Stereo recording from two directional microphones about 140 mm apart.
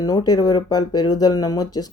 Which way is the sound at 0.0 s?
25° left (ahead or behind).